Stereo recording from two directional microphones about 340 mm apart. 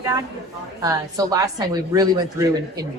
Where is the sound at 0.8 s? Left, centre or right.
Centre.